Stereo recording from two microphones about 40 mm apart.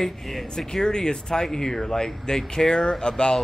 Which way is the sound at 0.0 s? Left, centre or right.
Centre.